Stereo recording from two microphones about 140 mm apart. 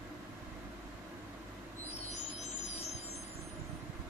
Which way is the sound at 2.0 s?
50° left (ahead or behind).